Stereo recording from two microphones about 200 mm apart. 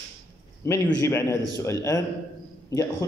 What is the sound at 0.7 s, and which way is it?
A man's voice, 10° left (ahead or behind).